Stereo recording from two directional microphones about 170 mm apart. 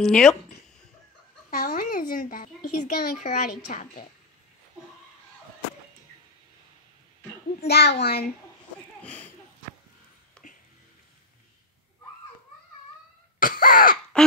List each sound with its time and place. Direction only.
0.0 s speech: 5° left (ahead or behind)
1.5 s speech: 55° left (ahead or behind)
7.6 s a child's voice: 75° left (ahead or behind)
9.0 s speech: 10° left (ahead or behind)
10.4 s music: 5° left (ahead or behind)
13.4 s cough: 55° left (ahead or behind)